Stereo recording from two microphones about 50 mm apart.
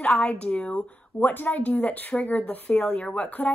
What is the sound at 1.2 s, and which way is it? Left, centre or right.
A woman's voice, left.